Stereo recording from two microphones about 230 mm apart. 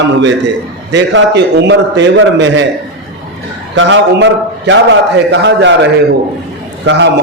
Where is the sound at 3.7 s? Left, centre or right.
Right.